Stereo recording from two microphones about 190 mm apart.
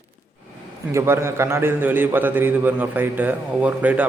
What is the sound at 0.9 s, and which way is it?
A man's voice, 15° right (ahead or behind).